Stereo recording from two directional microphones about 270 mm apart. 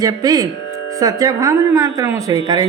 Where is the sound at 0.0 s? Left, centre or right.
Centre.